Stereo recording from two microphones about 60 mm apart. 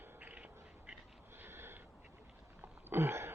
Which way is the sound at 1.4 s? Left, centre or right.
Right.